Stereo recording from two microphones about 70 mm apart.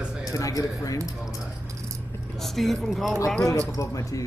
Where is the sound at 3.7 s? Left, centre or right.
Left.